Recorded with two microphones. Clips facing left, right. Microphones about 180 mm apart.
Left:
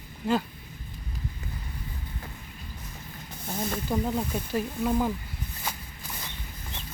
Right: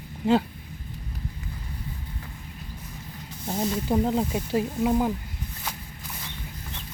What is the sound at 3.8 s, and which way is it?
Speech, 25° right (ahead or behind).